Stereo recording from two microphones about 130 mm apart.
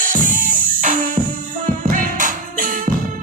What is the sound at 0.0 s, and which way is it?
Music, 90° right.